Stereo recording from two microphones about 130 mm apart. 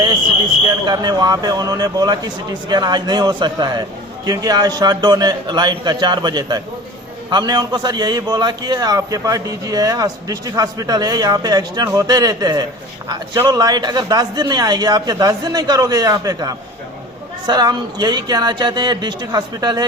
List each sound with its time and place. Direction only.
0.9 s a man's voice: 30° right (ahead or behind)